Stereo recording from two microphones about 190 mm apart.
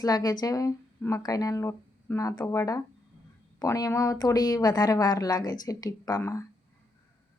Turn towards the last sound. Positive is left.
turn(degrees=15)  # may be behind; listen again after turning